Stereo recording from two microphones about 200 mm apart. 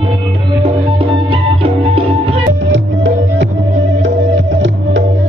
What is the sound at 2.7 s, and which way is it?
Music, 65° right (ahead or behind).